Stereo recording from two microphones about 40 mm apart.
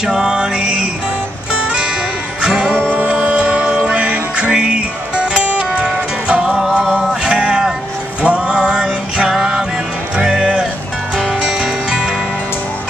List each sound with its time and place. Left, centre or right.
0.0 s music: centre
2.4 s music: right
2.9 s music: right; by 7.2 s centre
7.2 s music: right